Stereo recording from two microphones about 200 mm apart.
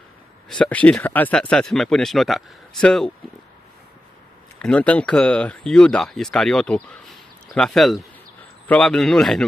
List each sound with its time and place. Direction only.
0.6 s speech: 5° left (ahead or behind)
4.6 s speech: 5° left (ahead or behind)